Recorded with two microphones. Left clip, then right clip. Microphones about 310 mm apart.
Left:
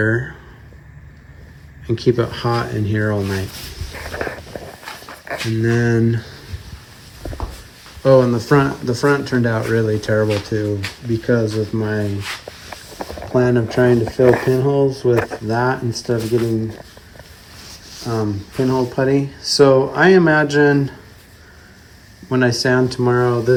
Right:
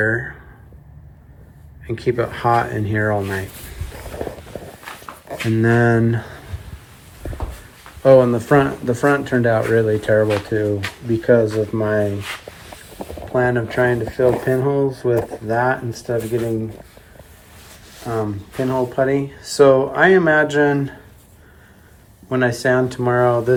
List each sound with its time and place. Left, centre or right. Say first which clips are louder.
0.0 s speech: even; centre
1.9 s speech: left 3 dB; centre
5.5 s speech: right 3 dB; centre
8.0 s speech: right 1 dB; centre
13.0 s vehicle: left 2 dB; centre
13.3 s speech: left 1 dB; centre
18.0 s speech: left 1 dB; centre
22.3 s speech: left 1 dB; centre